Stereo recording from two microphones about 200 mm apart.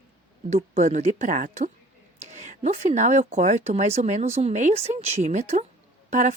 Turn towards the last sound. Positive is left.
turn(degrees=-35)  # may be behind; listen again after turning